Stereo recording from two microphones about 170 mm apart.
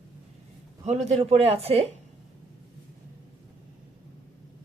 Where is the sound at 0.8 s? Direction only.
40° right (ahead or behind).